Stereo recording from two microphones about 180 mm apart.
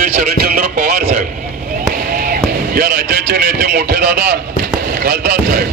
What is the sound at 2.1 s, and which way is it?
Music, 55° right (ahead or behind).